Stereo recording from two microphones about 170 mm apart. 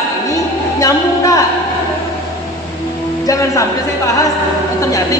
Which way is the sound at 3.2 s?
20° left (ahead or behind).